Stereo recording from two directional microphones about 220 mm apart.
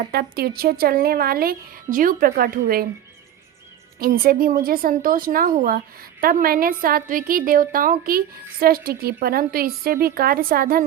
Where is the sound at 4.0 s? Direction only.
40° right (ahead or behind).